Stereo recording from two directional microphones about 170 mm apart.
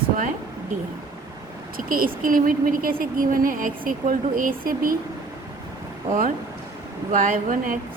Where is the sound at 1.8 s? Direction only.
55° right (ahead or behind).